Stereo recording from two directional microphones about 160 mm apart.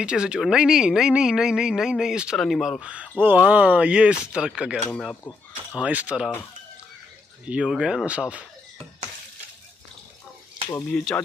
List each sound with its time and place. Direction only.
0.0 s speech: 5° right (ahead or behind)
4.9 s speech: 10° left (ahead or behind)
5.8 s speech: 10° right (ahead or behind)
7.4 s speech: 5° right (ahead or behind)
10.9 s speech: 5° left (ahead or behind)